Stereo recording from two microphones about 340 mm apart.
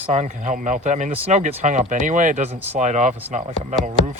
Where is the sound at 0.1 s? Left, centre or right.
Right.